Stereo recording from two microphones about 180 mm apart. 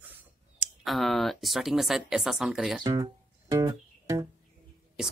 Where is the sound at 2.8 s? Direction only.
20° right (ahead or behind).